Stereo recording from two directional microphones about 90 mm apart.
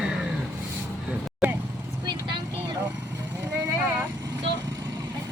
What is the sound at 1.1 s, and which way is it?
Vehicle, 20° right (ahead or behind).